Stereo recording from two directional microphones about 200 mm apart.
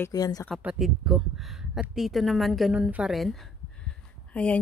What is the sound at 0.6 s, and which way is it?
Speech, 5° right (ahead or behind).